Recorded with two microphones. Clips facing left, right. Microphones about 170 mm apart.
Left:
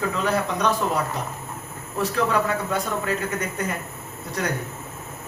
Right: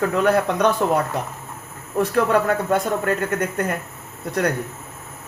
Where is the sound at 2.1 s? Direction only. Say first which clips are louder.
Right 4 dB; 55° right (ahead or behind).